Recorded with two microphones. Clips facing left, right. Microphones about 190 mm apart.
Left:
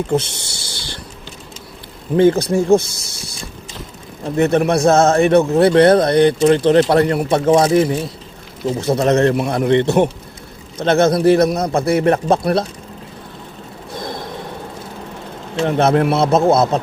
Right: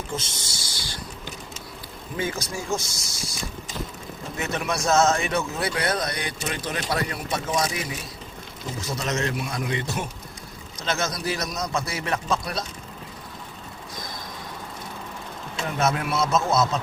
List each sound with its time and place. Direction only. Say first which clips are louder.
0.1 s speech: left 14 dB; 65° left (ahead or behind)
2.1 s speech: left 17 dB; 65° left (ahead or behind)
4.4 s speech: left 14 dB; 55° left (ahead or behind)
8.8 s speech: left 14 dB; 60° left (ahead or behind)
13.9 s a sound: left 12 dB; 60° left (ahead or behind)
15.6 s speech: left 11 dB; 60° left (ahead or behind)